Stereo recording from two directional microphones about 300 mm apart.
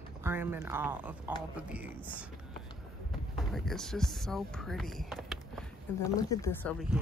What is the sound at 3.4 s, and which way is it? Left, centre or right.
Speech, centre.